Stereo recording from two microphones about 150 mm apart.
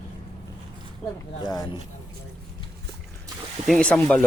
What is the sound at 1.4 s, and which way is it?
Speech, 25° left (ahead or behind).